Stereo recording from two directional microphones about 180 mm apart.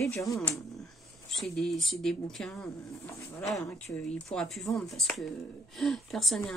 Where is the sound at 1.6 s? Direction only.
Centre (ahead or behind).